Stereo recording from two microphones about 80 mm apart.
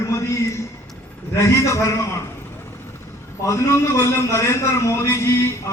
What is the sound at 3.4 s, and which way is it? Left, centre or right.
A man's voice, left.